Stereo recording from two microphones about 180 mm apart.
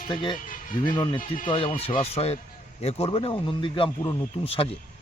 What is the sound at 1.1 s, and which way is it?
A man's voice, 45° left (ahead or behind).